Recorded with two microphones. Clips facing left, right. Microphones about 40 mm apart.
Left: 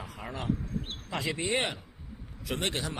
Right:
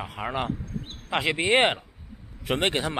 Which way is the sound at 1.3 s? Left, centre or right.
Right.